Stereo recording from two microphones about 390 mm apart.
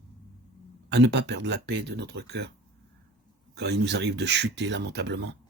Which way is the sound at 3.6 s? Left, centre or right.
Right.